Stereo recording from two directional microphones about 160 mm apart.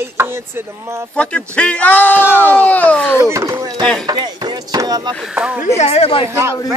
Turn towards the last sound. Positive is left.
turn(degrees=-15)  # may be behind; listen again after turning